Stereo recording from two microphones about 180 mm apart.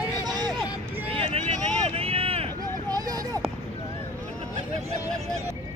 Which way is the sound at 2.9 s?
20° right (ahead or behind).